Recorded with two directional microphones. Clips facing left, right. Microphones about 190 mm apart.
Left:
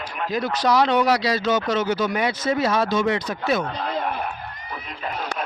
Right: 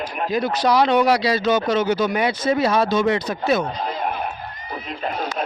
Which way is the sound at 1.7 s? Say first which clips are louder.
Right 3 dB; 15° right (ahead or behind).